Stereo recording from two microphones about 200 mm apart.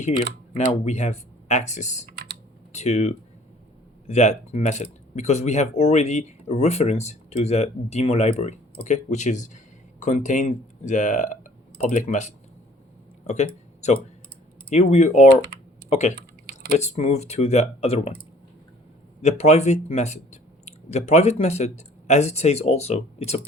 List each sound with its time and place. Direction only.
0.5 s speech: 35° left (ahead or behind)
13.2 s a sound: 35° left (ahead or behind)
14.7 s speech: 35° left (ahead or behind)
16.1 s typing: 50° right (ahead or behind)
16.7 s speech: 35° left (ahead or behind)
19.4 s speech: 35° left (ahead or behind)